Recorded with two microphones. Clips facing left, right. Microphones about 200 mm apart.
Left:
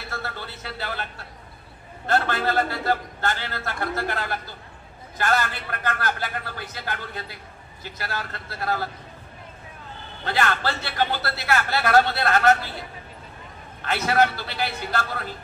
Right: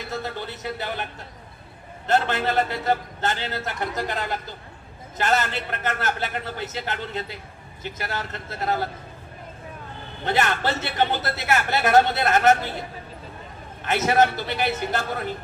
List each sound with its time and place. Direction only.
0.1 s a man's voice: 20° right (ahead or behind)
10.2 s a man's voice: 20° right (ahead or behind)
13.8 s a man's voice: 20° right (ahead or behind)